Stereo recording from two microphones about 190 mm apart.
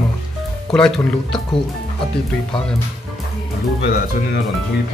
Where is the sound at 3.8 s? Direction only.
55° left (ahead or behind).